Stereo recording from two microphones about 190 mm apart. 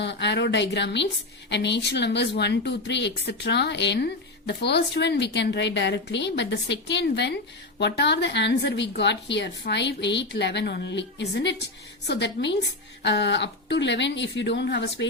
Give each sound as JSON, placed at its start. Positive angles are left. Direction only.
{"t": 0.0, "sound": "speech", "side_deg": 65}